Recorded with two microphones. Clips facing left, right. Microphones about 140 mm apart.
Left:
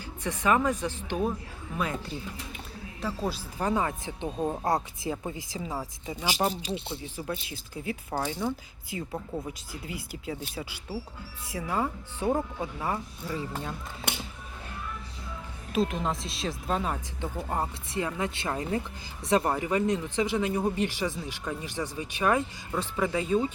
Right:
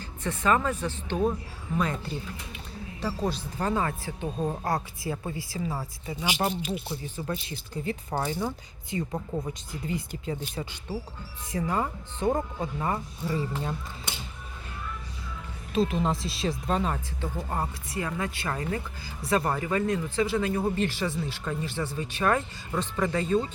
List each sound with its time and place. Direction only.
0.0 s speech: 10° left (ahead or behind)
4.4 s speech: 5° left (ahead or behind)
4.6 s speech: 20° left (ahead or behind)
6.5 s speech: 30° left (ahead or behind)
7.2 s speech: 10° left (ahead or behind)
15.7 s speech: centre (ahead or behind)
17.5 s speech: 20° left (ahead or behind)